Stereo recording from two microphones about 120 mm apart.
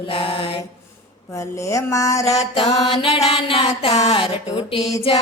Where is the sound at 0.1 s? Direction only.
50° left (ahead or behind).